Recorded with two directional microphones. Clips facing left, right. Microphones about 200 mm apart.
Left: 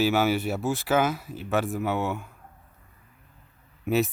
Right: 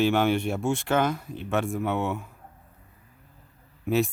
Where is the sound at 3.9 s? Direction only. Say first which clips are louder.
Even; centre (ahead or behind).